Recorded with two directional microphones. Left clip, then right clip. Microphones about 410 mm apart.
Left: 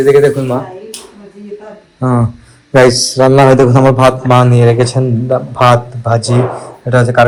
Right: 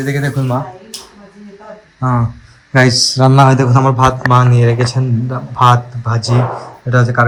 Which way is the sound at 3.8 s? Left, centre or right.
Left.